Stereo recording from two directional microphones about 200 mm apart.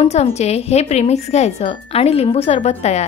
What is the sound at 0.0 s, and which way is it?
Speech, 35° left (ahead or behind).